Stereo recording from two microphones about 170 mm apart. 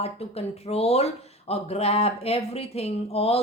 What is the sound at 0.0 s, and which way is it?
Speech, 35° left (ahead or behind).